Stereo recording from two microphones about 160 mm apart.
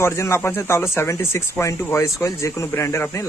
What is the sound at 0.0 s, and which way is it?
Speech, 15° left (ahead or behind).